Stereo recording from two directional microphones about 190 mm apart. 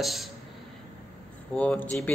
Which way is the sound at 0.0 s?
Centre (ahead or behind).